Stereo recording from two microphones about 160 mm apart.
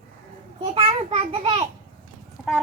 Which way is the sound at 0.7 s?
40° right (ahead or behind).